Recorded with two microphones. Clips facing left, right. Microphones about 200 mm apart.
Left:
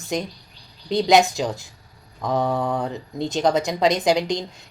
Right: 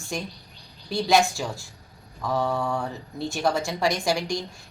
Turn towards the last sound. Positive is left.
turn(degrees=20)  # may be behind; listen again after turning